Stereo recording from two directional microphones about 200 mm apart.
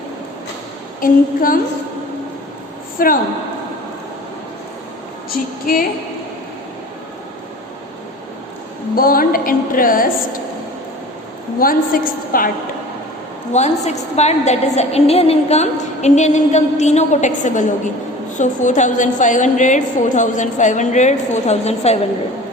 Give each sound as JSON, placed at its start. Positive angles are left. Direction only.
{"t": 1.0, "sound": "a woman's voice", "side_deg": 45}
{"t": 3.0, "sound": "a woman's voice", "side_deg": 45}
{"t": 5.7, "sound": "a woman's voice", "side_deg": 45}
{"t": 9.0, "sound": "a woman's voice", "side_deg": 45}
{"t": 11.6, "sound": "a woman's voice", "side_deg": 45}
{"t": 13.5, "sound": "a woman's voice", "side_deg": 35}